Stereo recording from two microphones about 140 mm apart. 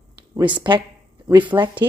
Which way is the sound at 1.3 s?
35° right (ahead or behind).